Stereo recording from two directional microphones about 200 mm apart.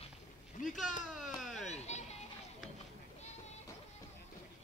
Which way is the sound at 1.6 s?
35° left (ahead or behind).